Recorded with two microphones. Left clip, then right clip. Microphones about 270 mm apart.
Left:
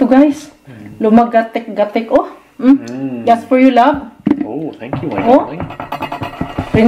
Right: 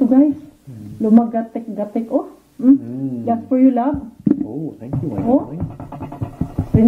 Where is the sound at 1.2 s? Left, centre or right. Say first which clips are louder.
Left 10 dB; centre.